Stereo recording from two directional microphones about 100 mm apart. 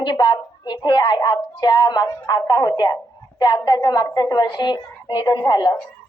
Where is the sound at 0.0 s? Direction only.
50° left (ahead or behind).